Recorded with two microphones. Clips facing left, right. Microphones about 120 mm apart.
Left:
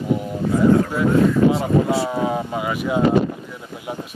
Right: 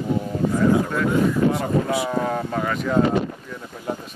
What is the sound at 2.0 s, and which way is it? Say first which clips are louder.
Speech: left 1 dB; 10° left (ahead or behind).